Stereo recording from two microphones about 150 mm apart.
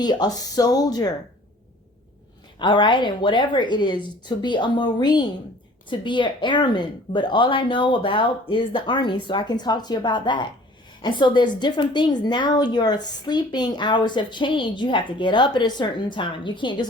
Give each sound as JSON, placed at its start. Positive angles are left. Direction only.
{"t": 0.0, "sound": "speech", "side_deg": 30}
{"t": 2.6, "sound": "a woman's voice", "side_deg": 30}